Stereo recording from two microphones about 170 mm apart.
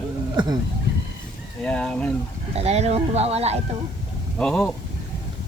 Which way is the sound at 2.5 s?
40° right (ahead or behind).